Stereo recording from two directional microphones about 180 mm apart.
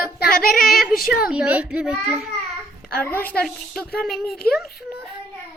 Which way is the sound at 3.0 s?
10° left (ahead or behind).